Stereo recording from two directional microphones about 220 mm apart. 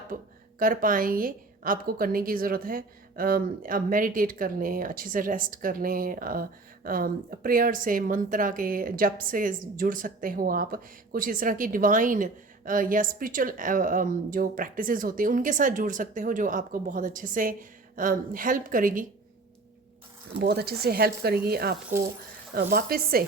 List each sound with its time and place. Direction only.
0.1 s a woman's voice: 40° right (ahead or behind)
20.4 s speech: 45° right (ahead or behind)